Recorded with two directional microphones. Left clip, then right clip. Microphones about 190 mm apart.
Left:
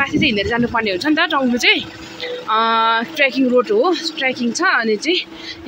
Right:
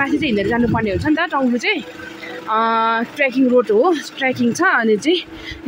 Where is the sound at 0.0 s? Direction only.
20° right (ahead or behind).